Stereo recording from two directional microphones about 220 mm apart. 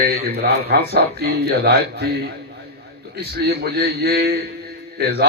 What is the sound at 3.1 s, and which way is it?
Speech, 45° right (ahead or behind).